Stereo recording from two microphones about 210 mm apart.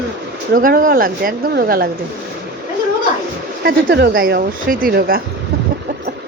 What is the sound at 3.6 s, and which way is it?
Speech, 50° right (ahead or behind).